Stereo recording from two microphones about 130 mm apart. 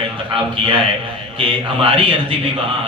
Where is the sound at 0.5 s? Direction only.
40° right (ahead or behind).